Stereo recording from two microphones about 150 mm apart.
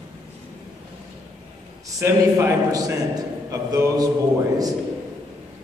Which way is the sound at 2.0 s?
20° right (ahead or behind).